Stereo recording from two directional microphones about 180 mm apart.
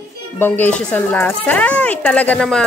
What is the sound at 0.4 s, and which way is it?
Speech, 10° left (ahead or behind).